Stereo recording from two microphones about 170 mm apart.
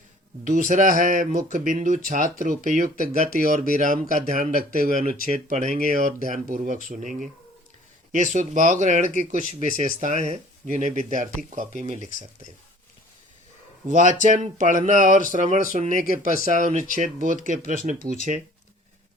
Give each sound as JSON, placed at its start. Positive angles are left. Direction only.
{"t": 0.4, "sound": "speech", "side_deg": -50}
{"t": 13.8, "sound": "speech", "side_deg": -50}